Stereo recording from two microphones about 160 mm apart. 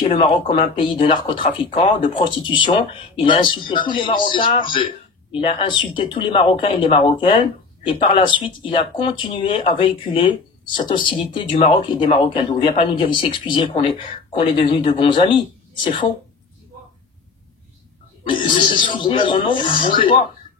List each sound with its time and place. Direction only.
0.1 s speech: 35° left (ahead or behind)
18.4 s speech: 30° left (ahead or behind)